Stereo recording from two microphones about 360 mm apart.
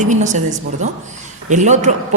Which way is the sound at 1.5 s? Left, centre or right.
Centre.